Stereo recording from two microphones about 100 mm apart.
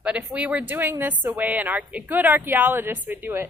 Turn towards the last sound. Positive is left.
turn(degrees=-20)  # may be behind; listen again after turning